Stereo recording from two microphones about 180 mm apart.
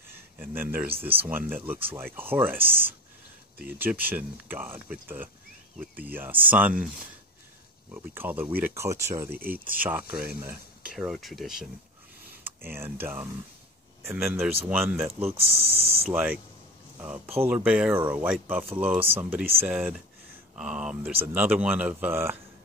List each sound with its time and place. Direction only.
0.1 s speech: 10° right (ahead or behind)
8.1 s speech: 10° right (ahead or behind)
12.4 s speech: 10° right (ahead or behind)
15.2 s speech: 30° right (ahead or behind)
16.1 s speech: 5° right (ahead or behind)